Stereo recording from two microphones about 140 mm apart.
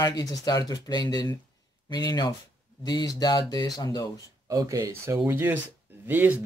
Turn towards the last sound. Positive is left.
turn(degrees=-15)  # may be behind; listen again after turning